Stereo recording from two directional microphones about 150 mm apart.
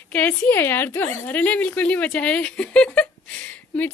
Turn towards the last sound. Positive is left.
turn(degrees=10)  # may be behind; listen again after turning